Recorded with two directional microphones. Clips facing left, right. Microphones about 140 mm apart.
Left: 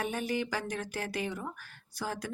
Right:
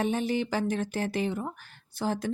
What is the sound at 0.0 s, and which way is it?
Speech, 25° right (ahead or behind).